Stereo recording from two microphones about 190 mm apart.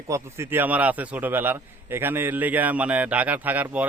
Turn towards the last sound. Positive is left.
turn(degrees=-10)  # may be behind; listen again after turning